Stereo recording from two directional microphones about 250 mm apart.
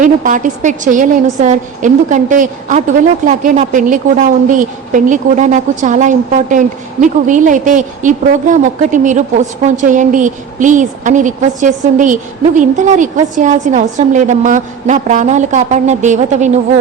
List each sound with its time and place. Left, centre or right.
0.0 s a woman's voice: right